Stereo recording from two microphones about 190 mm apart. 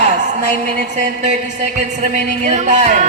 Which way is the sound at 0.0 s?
40° right (ahead or behind).